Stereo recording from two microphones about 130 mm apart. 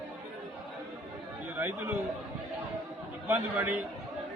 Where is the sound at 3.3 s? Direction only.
15° right (ahead or behind).